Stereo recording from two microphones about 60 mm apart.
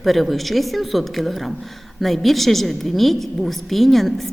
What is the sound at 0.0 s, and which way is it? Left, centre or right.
A woman's voice, centre.